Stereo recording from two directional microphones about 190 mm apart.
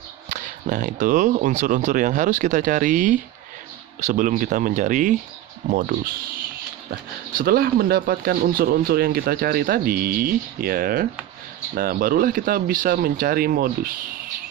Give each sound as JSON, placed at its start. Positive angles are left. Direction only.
{"t": 0.3, "sound": "speech", "side_deg": -40}
{"t": 5.9, "sound": "speech", "side_deg": -55}